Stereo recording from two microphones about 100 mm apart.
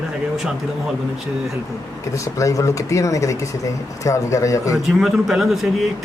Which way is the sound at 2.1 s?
30° left (ahead or behind).